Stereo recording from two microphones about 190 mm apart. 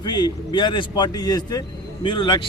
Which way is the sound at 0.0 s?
20° left (ahead or behind).